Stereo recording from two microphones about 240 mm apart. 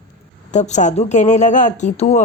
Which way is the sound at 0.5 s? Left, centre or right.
Left.